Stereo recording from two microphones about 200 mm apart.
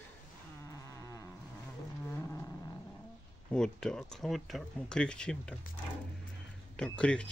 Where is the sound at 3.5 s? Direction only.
5° left (ahead or behind).